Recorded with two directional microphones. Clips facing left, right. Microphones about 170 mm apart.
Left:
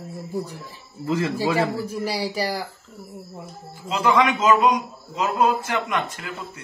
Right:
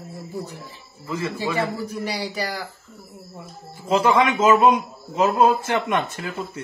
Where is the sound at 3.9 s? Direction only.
30° right (ahead or behind).